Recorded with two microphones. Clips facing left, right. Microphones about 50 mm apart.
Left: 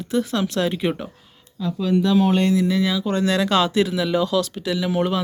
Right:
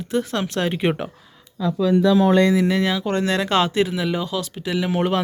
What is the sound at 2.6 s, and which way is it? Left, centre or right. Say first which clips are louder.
Speech: right 1 dB; right.